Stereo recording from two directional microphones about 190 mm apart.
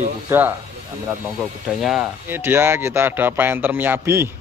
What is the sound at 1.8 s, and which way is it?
Speech, 5° right (ahead or behind).